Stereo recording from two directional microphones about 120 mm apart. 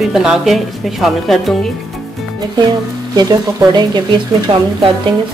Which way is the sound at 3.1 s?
35° right (ahead or behind).